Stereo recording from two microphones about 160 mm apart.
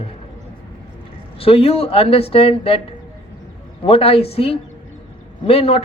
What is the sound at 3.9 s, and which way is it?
A man's voice, 35° left (ahead or behind).